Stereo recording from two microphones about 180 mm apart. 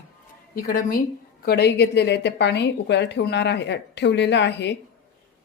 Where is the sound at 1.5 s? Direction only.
65° left (ahead or behind).